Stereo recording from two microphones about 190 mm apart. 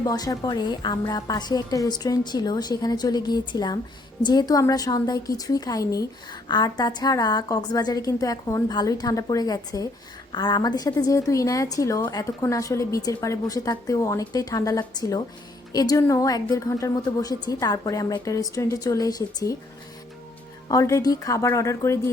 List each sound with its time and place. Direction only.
0.0 s a woman's voice: 20° left (ahead or behind)
20.7 s a woman's voice: 15° left (ahead or behind)